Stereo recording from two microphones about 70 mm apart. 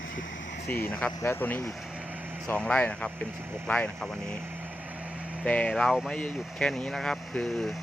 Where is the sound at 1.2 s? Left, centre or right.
Left.